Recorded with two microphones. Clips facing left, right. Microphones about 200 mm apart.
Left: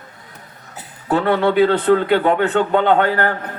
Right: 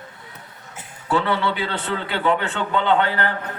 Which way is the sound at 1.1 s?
55° left (ahead or behind).